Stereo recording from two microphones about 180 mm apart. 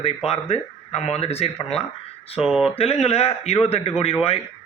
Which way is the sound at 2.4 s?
5° right (ahead or behind).